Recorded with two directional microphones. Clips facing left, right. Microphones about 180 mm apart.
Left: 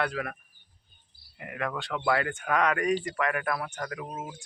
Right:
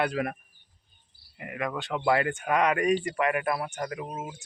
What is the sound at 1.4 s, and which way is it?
Speech, 10° right (ahead or behind).